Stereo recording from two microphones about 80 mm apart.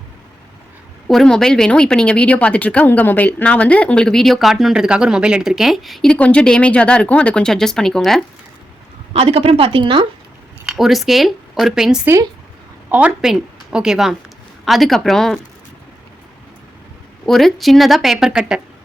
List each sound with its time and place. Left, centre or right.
1.0 s speech: centre
4.7 s speech: centre
6.1 s speech: centre
9.7 s speech: right
10.7 s speech: centre
12.9 s a woman's voice: centre
13.2 s a woman's voice: centre
17.2 s speech: centre